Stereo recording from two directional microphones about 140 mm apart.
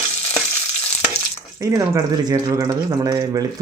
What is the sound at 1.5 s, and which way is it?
Speech, 25° right (ahead or behind).